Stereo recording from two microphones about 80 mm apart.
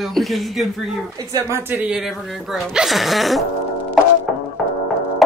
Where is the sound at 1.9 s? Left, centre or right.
Centre.